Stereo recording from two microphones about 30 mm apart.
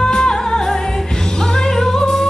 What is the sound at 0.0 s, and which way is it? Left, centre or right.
Music, left.